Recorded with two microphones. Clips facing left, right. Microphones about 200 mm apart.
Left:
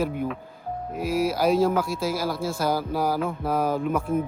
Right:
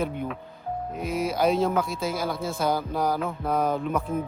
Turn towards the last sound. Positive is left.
turn(degrees=10)  # may be behind; listen again after turning